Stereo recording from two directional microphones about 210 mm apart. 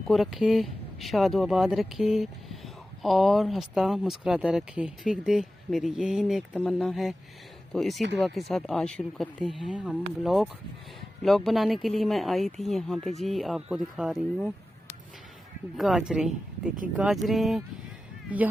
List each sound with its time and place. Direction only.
0.1 s speech: centre (ahead or behind)